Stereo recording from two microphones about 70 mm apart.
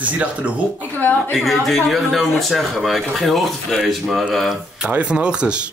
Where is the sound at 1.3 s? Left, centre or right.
Centre.